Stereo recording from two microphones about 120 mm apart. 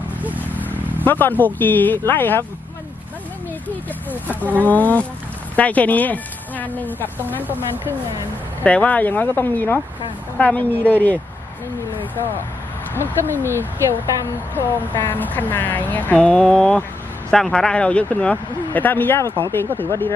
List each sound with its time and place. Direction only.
0.2 s vehicle: 15° right (ahead or behind)
0.5 s vehicle: 15° left (ahead or behind)
1.0 s speech: 15° left (ahead or behind)
4.4 s speech: 15° left (ahead or behind)
7.4 s speech: 15° right (ahead or behind)
8.6 s speech: 10° left (ahead or behind)
12.9 s speech: 20° left (ahead or behind)
13.4 s speech: 20° right (ahead or behind)
14.5 s speech: 15° left (ahead or behind)